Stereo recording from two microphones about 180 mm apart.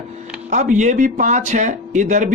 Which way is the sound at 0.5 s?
45° right (ahead or behind).